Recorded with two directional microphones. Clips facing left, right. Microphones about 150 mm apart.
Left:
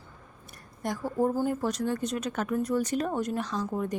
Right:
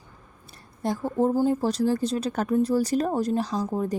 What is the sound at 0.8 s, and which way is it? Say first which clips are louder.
A woman's voice: right 4 dB; 30° right (ahead or behind).